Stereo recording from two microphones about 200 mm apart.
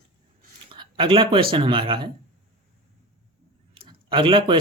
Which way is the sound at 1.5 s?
25° right (ahead or behind).